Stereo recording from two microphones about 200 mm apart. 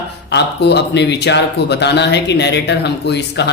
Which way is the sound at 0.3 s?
60° left (ahead or behind).